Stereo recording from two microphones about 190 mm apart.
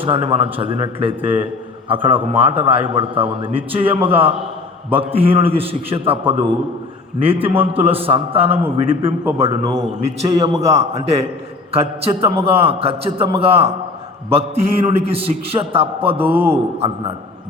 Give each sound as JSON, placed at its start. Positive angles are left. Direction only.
{"t": 0.0, "sound": "a man's voice", "side_deg": -30}
{"t": 10.2, "sound": "a man's voice", "side_deg": -20}
{"t": 10.8, "sound": "a man's voice", "side_deg": -30}
{"t": 16.2, "sound": "a man's voice", "side_deg": -10}
{"t": 16.8, "sound": "a man's voice", "side_deg": -25}